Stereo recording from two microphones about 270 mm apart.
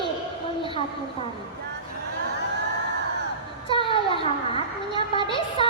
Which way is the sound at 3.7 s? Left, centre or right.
Centre.